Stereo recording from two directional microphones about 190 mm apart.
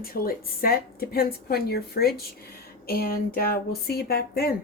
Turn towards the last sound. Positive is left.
turn(degrees=55)  # may be behind; listen again after turning